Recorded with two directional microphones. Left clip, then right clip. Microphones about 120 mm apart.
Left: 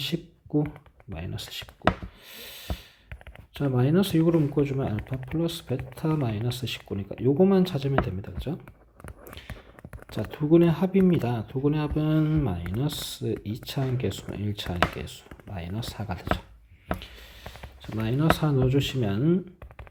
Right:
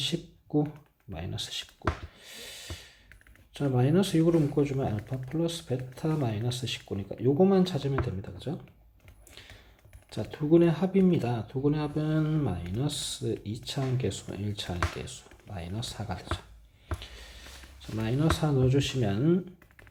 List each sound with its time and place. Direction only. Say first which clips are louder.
0.0 s computer keyboard: even; 35° left (ahead or behind)
1.1 s speech: right 1 dB; 30° left (ahead or behind)
2.2 s a sound: left 3 dB; 40° left (ahead or behind)
3.5 s speech: left 2 dB; 35° left (ahead or behind)
10.1 s speech: left 2 dB; 40° left (ahead or behind)
18.0 s speech: left 4 dB; 35° left (ahead or behind)